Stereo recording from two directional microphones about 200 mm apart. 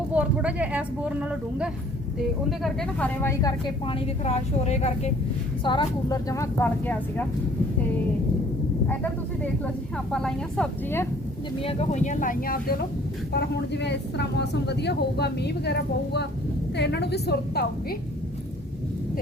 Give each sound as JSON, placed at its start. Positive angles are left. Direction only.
{"t": 0.1, "sound": "a woman's voice", "side_deg": -5}
{"t": 3.8, "sound": "a woman's voice", "side_deg": 30}
{"t": 5.6, "sound": "a woman's voice", "side_deg": 20}
{"t": 10.1, "sound": "a woman's voice", "side_deg": 5}
{"t": 11.6, "sound": "a woman's voice", "side_deg": 30}
{"t": 13.3, "sound": "speech", "side_deg": 60}